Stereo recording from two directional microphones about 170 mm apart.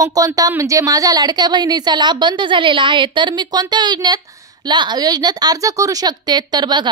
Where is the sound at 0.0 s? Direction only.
20° right (ahead or behind).